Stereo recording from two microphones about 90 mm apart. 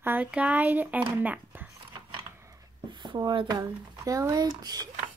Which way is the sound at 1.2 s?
20° right (ahead or behind).